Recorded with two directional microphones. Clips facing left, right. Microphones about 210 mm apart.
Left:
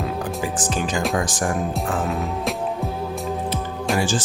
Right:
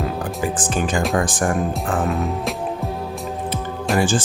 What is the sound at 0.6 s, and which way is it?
Speech, 55° right (ahead or behind).